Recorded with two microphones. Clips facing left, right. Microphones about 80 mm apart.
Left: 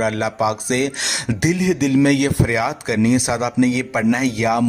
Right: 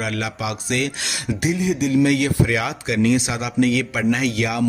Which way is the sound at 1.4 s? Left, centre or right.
Left.